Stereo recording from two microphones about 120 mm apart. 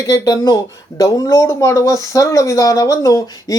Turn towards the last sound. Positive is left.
turn(degrees=30)  # may be behind; listen again after turning